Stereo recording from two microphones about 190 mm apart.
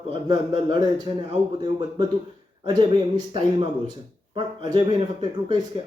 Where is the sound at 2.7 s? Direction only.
25° right (ahead or behind).